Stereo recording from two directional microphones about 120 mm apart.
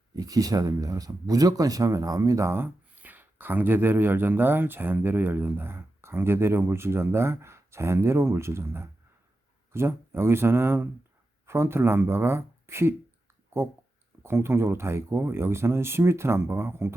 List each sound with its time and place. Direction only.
0.2 s speech: 30° right (ahead or behind)
14.2 s speech: 20° right (ahead or behind)